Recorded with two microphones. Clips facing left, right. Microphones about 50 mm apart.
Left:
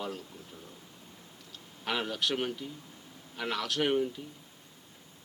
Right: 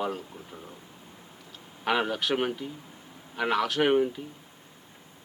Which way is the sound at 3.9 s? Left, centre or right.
Right.